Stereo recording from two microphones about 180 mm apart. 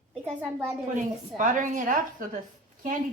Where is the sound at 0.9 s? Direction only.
45° right (ahead or behind).